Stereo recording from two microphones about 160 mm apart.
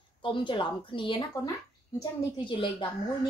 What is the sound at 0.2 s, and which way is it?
Speech, 30° left (ahead or behind).